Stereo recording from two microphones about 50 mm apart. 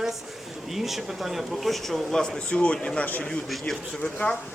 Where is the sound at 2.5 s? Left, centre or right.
Left.